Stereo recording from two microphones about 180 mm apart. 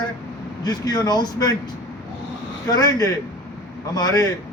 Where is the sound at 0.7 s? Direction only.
20° left (ahead or behind).